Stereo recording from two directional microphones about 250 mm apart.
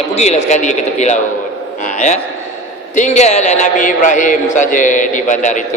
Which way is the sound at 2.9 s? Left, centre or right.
Left.